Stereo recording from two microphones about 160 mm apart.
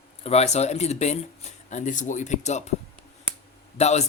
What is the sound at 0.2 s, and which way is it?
Speech, 40° left (ahead or behind).